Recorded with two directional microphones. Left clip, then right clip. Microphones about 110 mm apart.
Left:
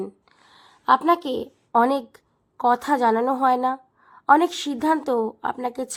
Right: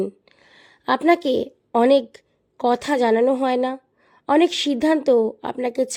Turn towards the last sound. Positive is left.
turn(degrees=-40)  # may be behind; listen again after turning